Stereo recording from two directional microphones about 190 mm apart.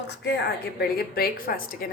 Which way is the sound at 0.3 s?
60° left (ahead or behind).